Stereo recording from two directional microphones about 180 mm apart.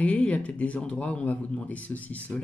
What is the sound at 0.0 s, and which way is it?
Speech, 10° left (ahead or behind).